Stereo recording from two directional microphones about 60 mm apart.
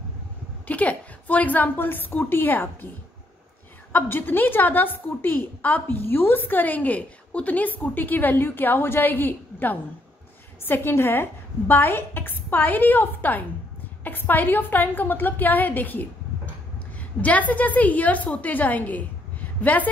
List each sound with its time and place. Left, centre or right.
0.7 s a woman's voice: left
3.9 s a woman's voice: left
17.2 s a woman's voice: left